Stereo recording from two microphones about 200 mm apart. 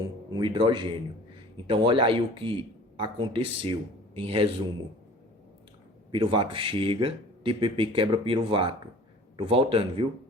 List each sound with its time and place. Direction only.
0.3 s speech: 25° right (ahead or behind)
6.1 s speech: 25° right (ahead or behind)